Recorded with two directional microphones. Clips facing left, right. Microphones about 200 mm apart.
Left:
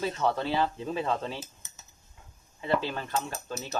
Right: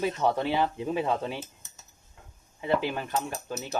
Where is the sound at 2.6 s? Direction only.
15° right (ahead or behind).